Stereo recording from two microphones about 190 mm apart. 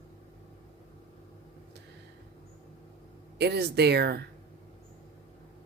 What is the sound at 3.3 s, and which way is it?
Speech, 60° right (ahead or behind).